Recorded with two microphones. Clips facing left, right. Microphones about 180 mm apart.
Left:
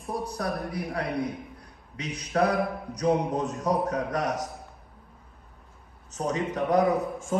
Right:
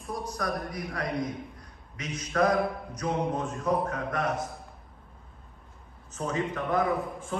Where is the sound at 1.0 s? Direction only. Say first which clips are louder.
Right 1 dB; 65° left (ahead or behind).